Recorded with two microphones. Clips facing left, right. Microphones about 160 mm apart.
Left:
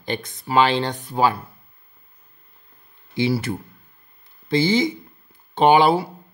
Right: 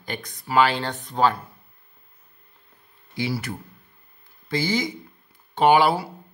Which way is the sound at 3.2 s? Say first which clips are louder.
Left 6 dB; 25° left (ahead or behind).